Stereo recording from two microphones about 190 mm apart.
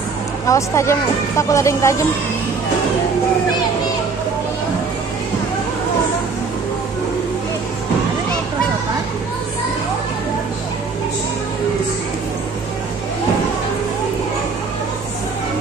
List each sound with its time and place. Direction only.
0.5 s speech: 15° left (ahead or behind)